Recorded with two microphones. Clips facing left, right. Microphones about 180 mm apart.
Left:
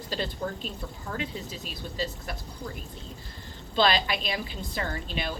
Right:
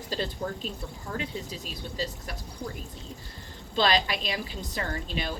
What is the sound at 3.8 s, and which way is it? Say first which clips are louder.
A woman's voice: left 1 dB; 40° right (ahead or behind).